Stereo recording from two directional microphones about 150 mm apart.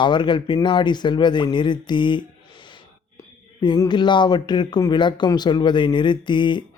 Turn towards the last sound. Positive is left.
turn(degrees=30)  # may be behind; listen again after turning